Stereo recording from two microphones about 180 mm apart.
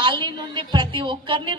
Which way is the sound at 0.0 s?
25° right (ahead or behind).